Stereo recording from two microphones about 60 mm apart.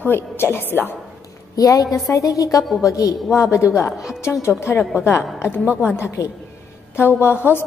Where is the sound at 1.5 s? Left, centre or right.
Left.